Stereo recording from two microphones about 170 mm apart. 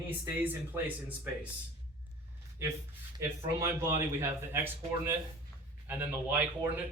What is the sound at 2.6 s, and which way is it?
Speech, 15° right (ahead or behind).